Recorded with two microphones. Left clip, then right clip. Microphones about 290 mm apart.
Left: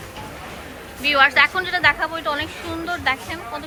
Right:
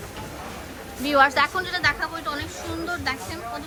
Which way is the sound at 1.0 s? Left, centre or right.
Centre.